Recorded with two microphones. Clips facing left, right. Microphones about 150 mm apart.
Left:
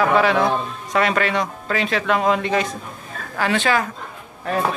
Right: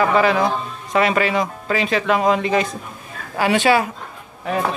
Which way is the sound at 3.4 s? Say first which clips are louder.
Right 4 dB; 20° right (ahead or behind).